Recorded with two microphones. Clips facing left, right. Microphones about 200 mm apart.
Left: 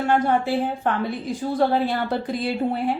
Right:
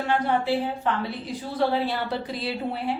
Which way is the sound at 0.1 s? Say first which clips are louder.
Left 2 dB; 50° left (ahead or behind).